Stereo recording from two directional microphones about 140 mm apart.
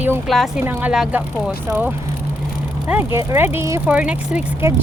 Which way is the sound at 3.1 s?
20° right (ahead or behind).